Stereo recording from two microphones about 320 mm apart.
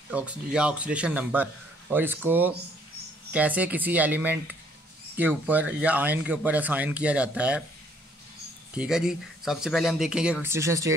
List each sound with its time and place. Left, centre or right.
0.1 s speech: centre
8.7 s speech: centre